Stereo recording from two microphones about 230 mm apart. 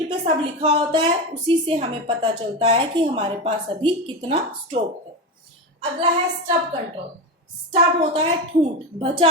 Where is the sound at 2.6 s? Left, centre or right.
Right.